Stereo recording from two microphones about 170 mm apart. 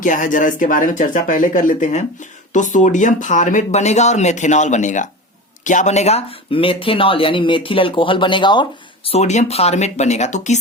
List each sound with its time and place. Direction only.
0.0 s speech: 50° left (ahead or behind); by 8.6 s 30° left (ahead or behind)
9.0 s speech: 40° left (ahead or behind)